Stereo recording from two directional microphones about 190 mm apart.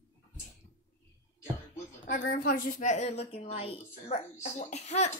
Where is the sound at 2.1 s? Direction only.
50° left (ahead or behind).